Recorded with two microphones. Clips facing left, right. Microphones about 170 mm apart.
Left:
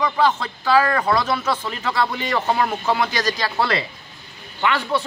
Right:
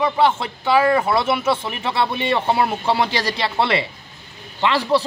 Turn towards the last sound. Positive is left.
turn(degrees=-35)  # may be behind; listen again after turning